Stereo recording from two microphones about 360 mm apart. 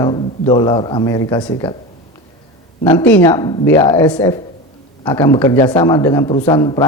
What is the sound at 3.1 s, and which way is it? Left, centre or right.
A man's voice, centre.